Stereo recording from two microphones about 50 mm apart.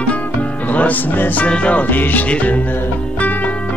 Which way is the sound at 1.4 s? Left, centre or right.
Left.